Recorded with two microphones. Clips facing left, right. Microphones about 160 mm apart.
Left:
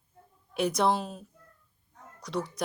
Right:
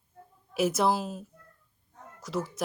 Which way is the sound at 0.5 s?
5° right (ahead or behind).